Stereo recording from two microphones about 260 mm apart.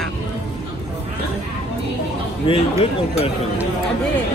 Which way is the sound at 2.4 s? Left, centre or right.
Left.